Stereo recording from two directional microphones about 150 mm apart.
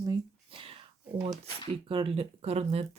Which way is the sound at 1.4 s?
35° right (ahead or behind).